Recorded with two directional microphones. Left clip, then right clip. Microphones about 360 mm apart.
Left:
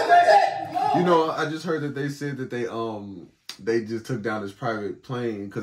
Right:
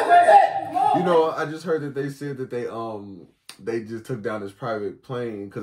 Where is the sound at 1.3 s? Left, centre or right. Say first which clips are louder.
Right 1 dB; centre.